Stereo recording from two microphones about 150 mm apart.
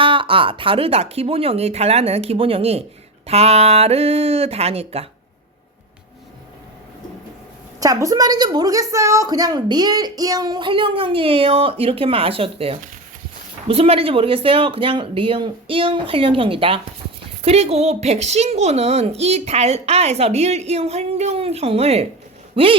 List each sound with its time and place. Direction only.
0.0 s a child's voice: 35° right (ahead or behind)
7.8 s a woman's voice: 20° right (ahead or behind); by 22.8 s 35° right (ahead or behind)